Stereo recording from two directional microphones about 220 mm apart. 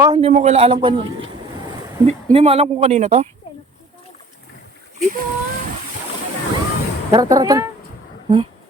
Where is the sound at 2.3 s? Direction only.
30° right (ahead or behind).